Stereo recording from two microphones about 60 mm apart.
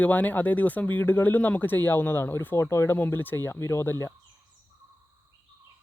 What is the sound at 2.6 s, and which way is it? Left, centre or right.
Speech, left.